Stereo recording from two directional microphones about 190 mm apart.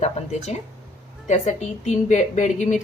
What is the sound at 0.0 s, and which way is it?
A woman's voice, 35° left (ahead or behind).